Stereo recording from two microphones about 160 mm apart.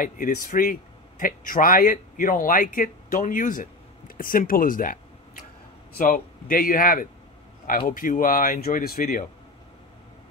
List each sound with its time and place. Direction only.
0.0 s a man's voice: 60° left (ahead or behind)
5.9 s a man's voice: 60° left (ahead or behind)